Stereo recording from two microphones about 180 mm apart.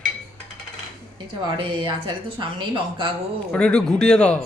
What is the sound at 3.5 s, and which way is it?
Speech, 5° left (ahead or behind).